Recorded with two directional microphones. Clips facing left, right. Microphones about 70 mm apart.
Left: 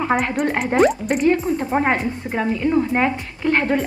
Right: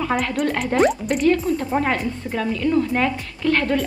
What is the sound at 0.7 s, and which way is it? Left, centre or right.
A woman's voice, left.